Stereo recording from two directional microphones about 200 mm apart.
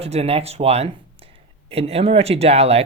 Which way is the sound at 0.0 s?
30° right (ahead or behind).